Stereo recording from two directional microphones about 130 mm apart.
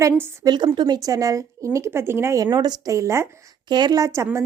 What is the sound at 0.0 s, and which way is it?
A woman's voice, 25° right (ahead or behind).